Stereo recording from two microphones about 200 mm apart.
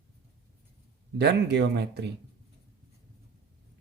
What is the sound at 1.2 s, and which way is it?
Speech, 60° right (ahead or behind).